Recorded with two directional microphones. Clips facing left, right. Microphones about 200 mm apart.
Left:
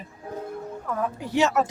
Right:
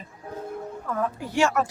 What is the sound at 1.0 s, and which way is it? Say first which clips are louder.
Speech: left 1 dB; 20° left (ahead or behind).